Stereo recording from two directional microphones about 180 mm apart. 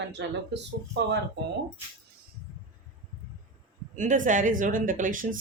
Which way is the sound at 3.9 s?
45° right (ahead or behind).